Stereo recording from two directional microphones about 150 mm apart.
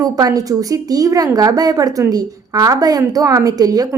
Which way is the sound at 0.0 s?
25° right (ahead or behind).